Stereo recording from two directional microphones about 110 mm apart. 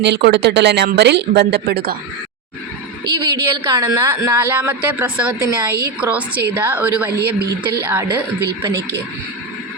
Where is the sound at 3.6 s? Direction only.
35° right (ahead or behind).